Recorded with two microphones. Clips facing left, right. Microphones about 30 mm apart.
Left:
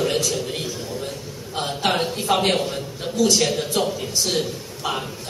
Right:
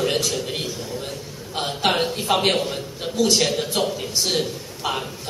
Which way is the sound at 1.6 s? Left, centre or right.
Centre.